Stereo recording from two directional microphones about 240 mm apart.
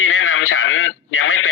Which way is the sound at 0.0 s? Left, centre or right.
Left.